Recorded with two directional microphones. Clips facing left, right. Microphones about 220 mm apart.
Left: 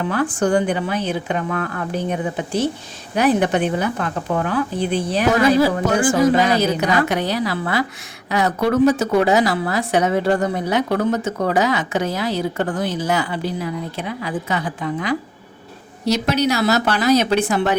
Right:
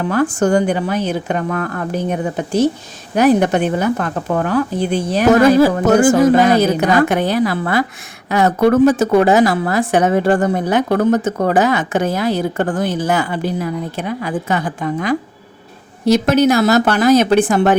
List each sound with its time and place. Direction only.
0.1 s a woman's voice: 45° right (ahead or behind)